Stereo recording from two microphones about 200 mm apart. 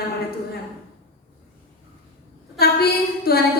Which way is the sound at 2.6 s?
50° left (ahead or behind).